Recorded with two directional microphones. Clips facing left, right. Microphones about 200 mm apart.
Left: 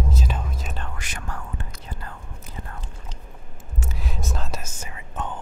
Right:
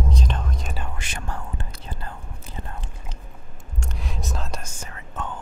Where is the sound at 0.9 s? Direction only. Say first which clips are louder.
Right 2 dB; 30° right (ahead or behind).